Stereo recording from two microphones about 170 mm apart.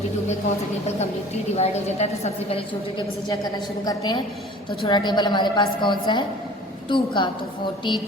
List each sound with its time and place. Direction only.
1.5 s a woman's voice: 40° left (ahead or behind)
3.8 s a woman's voice: 25° left (ahead or behind)